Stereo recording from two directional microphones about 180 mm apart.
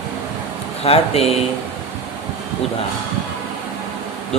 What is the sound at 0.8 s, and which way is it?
Speech, 35° left (ahead or behind).